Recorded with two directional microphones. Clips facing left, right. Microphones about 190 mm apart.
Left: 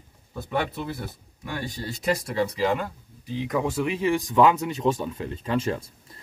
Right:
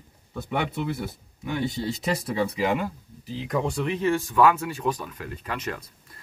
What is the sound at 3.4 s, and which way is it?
Speech, centre (ahead or behind).